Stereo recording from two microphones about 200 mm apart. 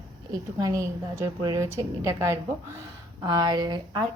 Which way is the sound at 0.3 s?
15° right (ahead or behind).